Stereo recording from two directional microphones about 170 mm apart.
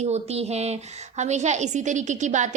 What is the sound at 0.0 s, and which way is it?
A woman's voice, 40° right (ahead or behind).